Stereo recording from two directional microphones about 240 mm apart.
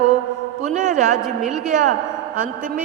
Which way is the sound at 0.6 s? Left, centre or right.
Right.